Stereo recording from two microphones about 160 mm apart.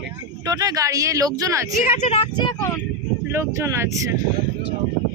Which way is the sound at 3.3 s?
15° right (ahead or behind).